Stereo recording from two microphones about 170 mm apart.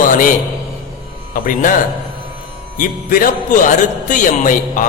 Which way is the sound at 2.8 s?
55° left (ahead or behind).